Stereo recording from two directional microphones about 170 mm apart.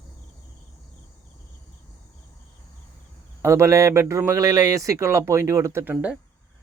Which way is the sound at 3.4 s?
15° right (ahead or behind).